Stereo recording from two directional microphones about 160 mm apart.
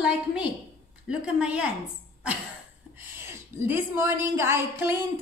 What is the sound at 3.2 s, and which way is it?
Speech, 15° right (ahead or behind).